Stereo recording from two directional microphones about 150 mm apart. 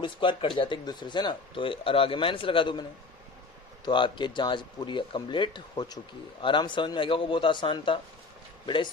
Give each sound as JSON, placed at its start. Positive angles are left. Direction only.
{"t": 0.0, "sound": "speech", "side_deg": 35}
{"t": 3.8, "sound": "speech", "side_deg": 30}